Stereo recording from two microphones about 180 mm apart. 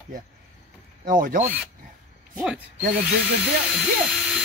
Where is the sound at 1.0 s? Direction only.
50° right (ahead or behind).